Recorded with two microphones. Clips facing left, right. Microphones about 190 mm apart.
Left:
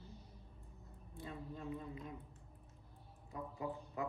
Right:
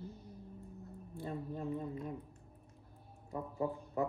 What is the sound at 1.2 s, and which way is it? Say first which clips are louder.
Speech: right 6 dB; 40° right (ahead or behind).